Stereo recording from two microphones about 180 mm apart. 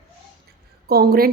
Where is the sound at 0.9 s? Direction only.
55° right (ahead or behind).